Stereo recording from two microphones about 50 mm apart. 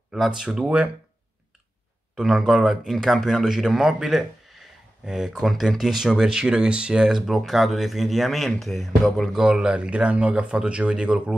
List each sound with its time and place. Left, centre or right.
0.1 s speech: centre
0.5 s speech: right
2.2 s a man's voice: centre
9.4 s speech: centre